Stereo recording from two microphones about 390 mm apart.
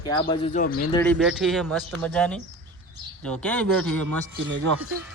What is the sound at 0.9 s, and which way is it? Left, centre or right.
Speech, centre.